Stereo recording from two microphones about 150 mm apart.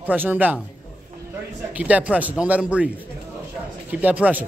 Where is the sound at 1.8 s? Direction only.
10° right (ahead or behind).